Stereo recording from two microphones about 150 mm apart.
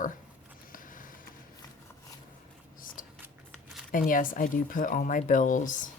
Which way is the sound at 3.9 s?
65° left (ahead or behind).